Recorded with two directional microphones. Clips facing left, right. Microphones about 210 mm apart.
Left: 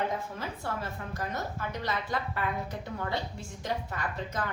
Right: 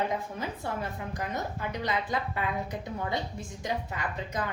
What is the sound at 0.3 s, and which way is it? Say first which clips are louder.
A woman's voice: right 2 dB; 15° right (ahead or behind).